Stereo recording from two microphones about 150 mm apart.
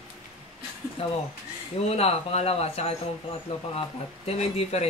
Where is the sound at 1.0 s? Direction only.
40° left (ahead or behind).